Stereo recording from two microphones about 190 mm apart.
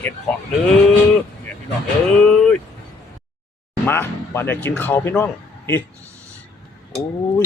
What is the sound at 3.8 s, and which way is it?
Speech, 10° left (ahead or behind).